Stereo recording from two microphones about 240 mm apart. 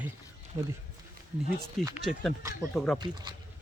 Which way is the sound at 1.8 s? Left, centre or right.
Centre.